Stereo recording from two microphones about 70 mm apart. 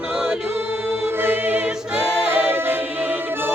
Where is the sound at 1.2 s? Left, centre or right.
Right.